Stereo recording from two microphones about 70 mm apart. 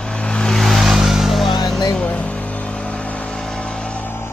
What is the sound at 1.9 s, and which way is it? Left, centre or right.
Vehicle, centre.